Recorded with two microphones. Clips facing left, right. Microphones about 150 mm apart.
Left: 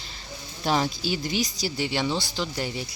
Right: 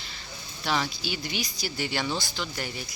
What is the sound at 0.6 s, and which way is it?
Speech, 40° left (ahead or behind).